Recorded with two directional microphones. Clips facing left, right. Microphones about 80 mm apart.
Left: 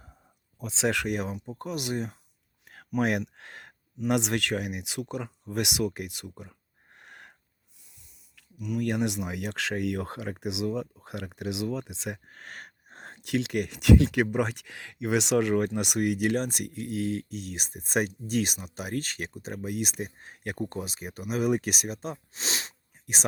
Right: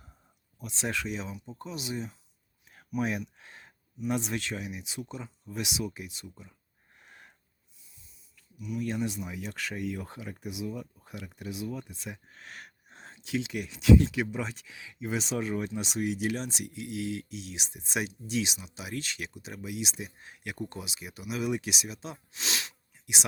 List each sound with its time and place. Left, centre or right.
0.8 s speech: left
10.4 s speech: left
11.0 s speech: left
12.3 s speech: left